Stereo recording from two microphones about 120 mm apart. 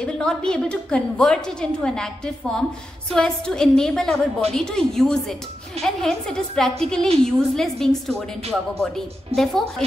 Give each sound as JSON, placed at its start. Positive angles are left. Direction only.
{"t": 0.0, "sound": "a woman's voice", "side_deg": 5}